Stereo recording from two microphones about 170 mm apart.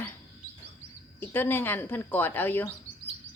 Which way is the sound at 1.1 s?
10° left (ahead or behind).